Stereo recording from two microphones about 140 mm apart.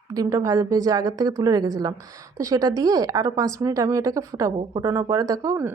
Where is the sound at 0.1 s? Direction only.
25° right (ahead or behind).